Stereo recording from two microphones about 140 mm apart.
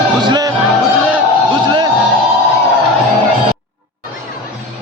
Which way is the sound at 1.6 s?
35° right (ahead or behind).